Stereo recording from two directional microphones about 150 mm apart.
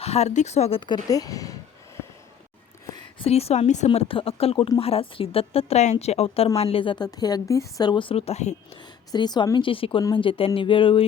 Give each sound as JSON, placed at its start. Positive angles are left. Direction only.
{"t": 0.0, "sound": "a woman's voice", "side_deg": 45}
{"t": 2.9, "sound": "speech", "side_deg": 40}
{"t": 3.8, "sound": "a woman's voice", "side_deg": 35}
{"t": 8.8, "sound": "a woman's voice", "side_deg": 30}